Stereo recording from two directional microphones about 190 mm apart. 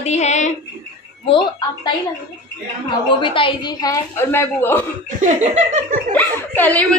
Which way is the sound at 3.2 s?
25° left (ahead or behind).